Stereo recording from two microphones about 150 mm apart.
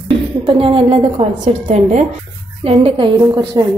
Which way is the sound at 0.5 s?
35° right (ahead or behind).